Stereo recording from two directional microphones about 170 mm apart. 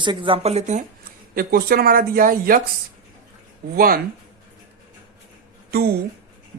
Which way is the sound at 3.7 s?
60° right (ahead or behind).